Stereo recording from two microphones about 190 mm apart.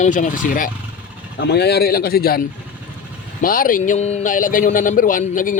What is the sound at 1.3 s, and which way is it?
Speech, 60° left (ahead or behind).